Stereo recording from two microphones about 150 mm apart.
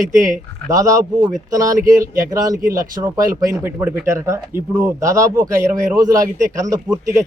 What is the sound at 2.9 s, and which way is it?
Speech, 20° right (ahead or behind).